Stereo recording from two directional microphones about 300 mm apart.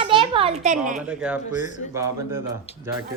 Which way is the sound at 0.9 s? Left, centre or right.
Centre.